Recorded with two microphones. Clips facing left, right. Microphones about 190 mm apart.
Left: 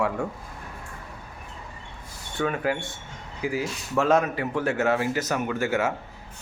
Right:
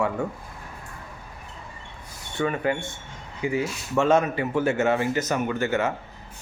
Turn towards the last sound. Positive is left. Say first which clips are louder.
# right 1 dB
turn(degrees=5)  # may be behind; listen again after turning